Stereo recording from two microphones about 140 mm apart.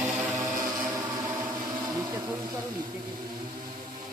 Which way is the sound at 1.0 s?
25° right (ahead or behind).